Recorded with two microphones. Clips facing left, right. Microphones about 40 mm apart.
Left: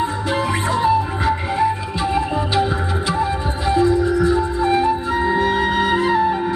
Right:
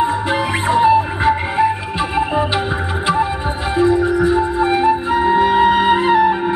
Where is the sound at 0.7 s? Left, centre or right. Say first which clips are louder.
Right 6 dB; right.